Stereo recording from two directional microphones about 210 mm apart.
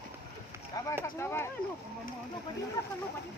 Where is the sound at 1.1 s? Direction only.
10° left (ahead or behind).